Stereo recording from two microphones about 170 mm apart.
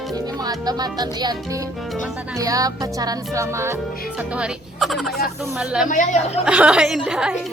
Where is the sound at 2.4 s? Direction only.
20° right (ahead or behind).